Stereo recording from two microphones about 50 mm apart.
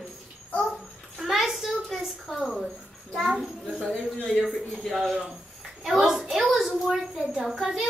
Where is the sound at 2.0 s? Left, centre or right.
Centre.